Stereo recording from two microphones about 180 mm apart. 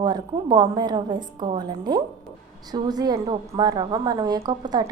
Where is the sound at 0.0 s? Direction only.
25° right (ahead or behind).